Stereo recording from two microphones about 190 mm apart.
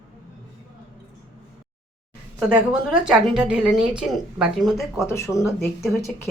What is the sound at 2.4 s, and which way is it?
Speech, 5° right (ahead or behind).